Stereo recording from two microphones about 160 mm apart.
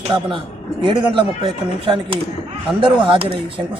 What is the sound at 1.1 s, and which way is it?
Speech, 30° right (ahead or behind).